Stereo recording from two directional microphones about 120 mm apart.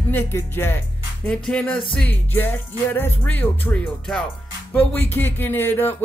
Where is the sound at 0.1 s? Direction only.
20° left (ahead or behind).